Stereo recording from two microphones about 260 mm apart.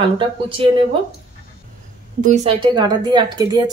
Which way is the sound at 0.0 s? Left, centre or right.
Centre.